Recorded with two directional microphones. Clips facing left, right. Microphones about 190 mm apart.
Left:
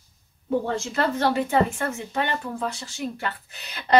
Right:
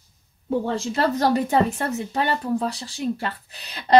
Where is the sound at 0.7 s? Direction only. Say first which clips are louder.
Right 2 dB; 35° right (ahead or behind).